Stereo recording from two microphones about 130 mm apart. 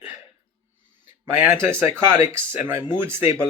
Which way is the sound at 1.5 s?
20° right (ahead or behind).